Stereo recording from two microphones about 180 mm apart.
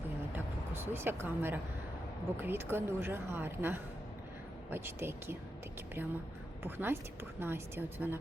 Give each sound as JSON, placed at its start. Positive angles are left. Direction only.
{"t": 0.3, "sound": "a sound", "side_deg": -15}
{"t": 2.4, "sound": "a woman's voice", "side_deg": -10}
{"t": 6.6, "sound": "a woman's voice", "side_deg": -10}